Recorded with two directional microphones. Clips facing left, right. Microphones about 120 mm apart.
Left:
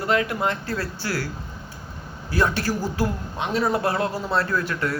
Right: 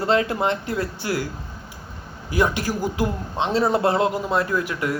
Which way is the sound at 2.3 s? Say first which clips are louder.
Right 1 dB; 15° right (ahead or behind).